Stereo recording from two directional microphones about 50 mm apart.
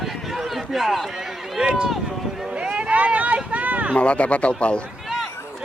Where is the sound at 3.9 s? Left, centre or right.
Left.